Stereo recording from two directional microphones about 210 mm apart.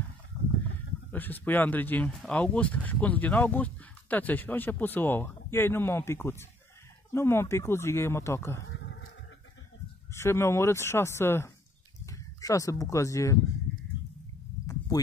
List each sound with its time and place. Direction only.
1.1 s speech: 10° left (ahead or behind)
8.6 s bee: 60° left (ahead or behind)
10.1 s speech: 10° left (ahead or behind)